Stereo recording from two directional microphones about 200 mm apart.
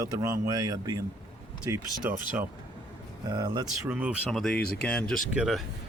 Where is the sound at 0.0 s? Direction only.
15° right (ahead or behind).